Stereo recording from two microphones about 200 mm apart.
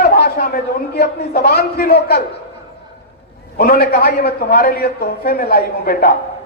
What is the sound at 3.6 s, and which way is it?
A man's voice, 45° left (ahead or behind).